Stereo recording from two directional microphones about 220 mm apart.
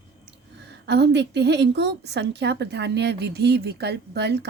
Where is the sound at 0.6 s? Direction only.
50° right (ahead or behind).